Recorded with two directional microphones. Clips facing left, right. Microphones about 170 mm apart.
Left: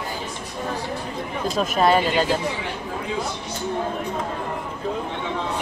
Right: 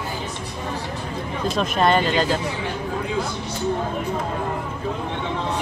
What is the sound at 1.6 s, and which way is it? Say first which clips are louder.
Speech: left 1 dB; 5° left (ahead or behind).